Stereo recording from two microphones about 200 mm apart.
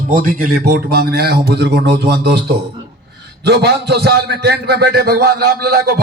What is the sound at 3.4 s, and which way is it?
A man's voice, 55° right (ahead or behind).